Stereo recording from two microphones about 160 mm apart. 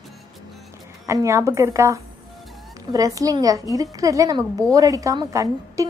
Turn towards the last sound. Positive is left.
turn(degrees=-20)  # may be behind; listen again after turning